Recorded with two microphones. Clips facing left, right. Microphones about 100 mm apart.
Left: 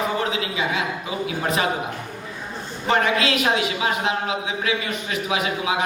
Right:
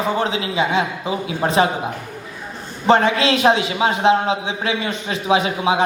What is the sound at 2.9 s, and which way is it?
A man's voice, 30° right (ahead or behind).